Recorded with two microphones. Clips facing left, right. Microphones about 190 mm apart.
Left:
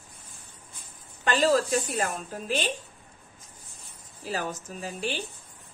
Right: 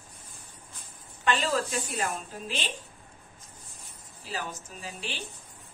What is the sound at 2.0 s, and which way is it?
Speech, 45° left (ahead or behind).